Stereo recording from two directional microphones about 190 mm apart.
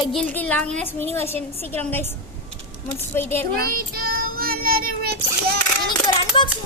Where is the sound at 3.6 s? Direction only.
50° right (ahead or behind).